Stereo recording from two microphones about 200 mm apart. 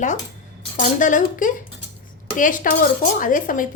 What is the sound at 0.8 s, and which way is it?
Dishes, 40° left (ahead or behind).